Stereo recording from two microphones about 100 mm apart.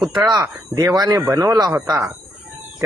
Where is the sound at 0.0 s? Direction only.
Centre (ahead or behind).